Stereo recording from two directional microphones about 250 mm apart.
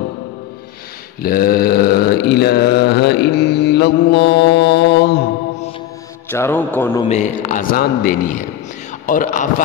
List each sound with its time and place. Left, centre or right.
1.2 s mantra: left
6.3 s a man's voice: centre
7.1 s mantra: left